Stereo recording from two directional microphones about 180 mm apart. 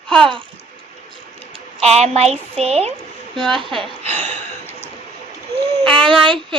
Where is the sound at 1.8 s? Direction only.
35° right (ahead or behind).